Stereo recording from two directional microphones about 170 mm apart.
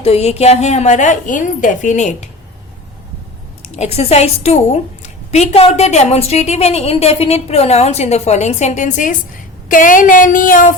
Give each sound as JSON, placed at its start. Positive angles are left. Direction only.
{"t": 0.0, "sound": "a woman's voice", "side_deg": 40}
{"t": 3.6, "sound": "a woman's voice", "side_deg": 40}